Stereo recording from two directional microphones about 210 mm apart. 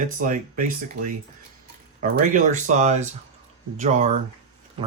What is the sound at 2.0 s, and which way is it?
Speech, 40° right (ahead or behind).